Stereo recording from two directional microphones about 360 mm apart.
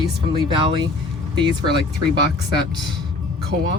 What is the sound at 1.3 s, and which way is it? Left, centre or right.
Speech, centre.